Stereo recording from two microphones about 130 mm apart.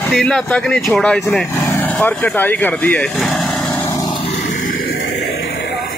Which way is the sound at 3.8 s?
20° left (ahead or behind).